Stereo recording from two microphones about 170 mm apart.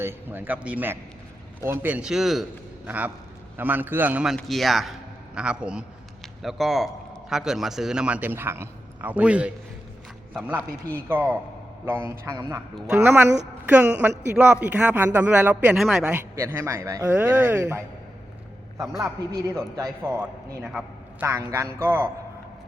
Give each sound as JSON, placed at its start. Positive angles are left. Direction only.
{"t": 0.0, "sound": "a man's voice", "side_deg": -15}
{"t": 16.3, "sound": "a man's voice", "side_deg": -15}
{"t": 19.7, "sound": "a man's voice", "side_deg": -15}